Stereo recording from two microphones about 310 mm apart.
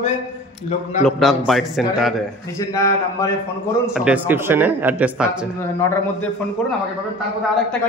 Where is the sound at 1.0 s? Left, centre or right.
Centre.